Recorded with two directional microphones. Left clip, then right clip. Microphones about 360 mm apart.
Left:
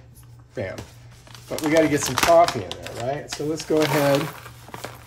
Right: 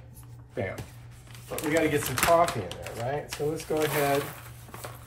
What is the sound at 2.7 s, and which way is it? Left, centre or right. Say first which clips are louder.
Speech: left 5 dB; left.